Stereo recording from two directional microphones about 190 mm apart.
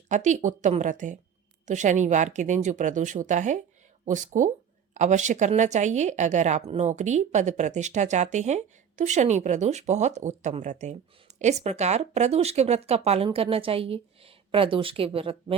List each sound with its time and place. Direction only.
0.1 s speech: 40° right (ahead or behind)